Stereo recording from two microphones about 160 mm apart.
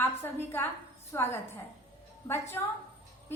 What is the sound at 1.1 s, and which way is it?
Speech, 15° left (ahead or behind).